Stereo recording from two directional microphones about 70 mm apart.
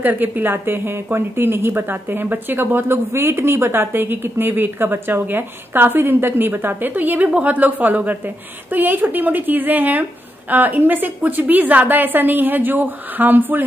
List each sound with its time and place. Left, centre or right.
0.0 s a woman's voice: right